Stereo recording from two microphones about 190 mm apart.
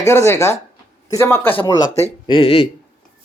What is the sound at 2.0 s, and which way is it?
Speech, 30° left (ahead or behind).